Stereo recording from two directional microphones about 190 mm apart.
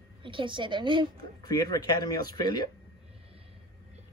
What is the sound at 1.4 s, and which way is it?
Speech, 20° left (ahead or behind).